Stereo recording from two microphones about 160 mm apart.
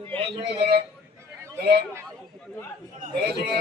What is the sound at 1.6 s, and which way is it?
Speech, 70° right (ahead or behind).